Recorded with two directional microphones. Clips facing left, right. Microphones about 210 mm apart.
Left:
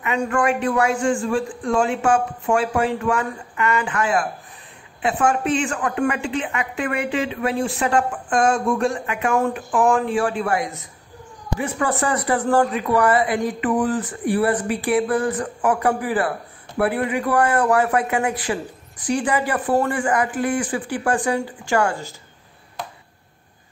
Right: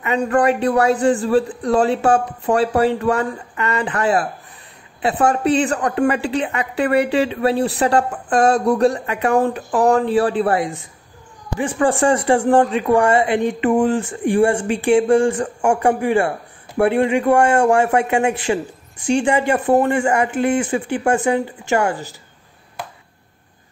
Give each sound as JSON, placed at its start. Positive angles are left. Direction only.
{"t": 0.0, "sound": "a woman's voice", "side_deg": -35}